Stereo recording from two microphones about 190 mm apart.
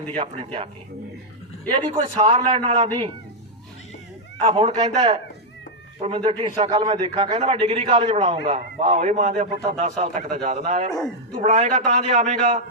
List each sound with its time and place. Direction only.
0.2 s a man's voice: 30° right (ahead or behind)
1.7 s a man's voice: 25° right (ahead or behind)
4.4 s a man's voice: 30° right (ahead or behind)